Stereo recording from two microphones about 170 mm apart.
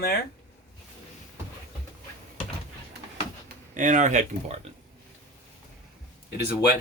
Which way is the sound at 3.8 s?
50° right (ahead or behind).